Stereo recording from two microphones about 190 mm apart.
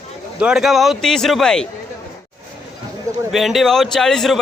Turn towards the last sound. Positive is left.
turn(degrees=0)  # may be behind; listen again after turning